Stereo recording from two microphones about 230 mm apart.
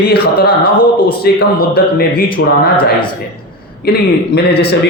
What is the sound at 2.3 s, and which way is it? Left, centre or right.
Speech, left.